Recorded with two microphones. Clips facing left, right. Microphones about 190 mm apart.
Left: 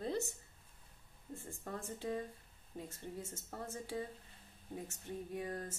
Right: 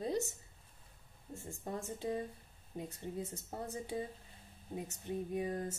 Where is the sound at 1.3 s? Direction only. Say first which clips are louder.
Right 3 dB; 15° right (ahead or behind).